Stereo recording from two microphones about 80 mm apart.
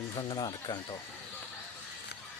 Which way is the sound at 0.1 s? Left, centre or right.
Left.